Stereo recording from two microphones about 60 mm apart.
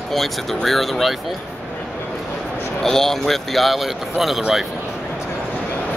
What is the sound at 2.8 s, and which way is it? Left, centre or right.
A man's voice, centre.